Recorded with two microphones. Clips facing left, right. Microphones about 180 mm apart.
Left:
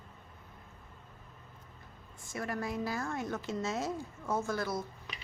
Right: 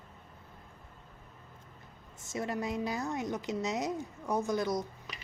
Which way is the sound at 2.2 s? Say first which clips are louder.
Right 2 dB; 20° right (ahead or behind).